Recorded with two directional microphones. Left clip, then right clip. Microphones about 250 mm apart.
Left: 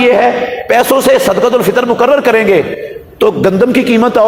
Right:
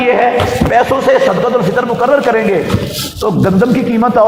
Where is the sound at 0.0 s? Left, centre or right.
Left.